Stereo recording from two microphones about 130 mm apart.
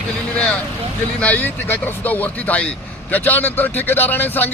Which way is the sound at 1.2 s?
10° left (ahead or behind).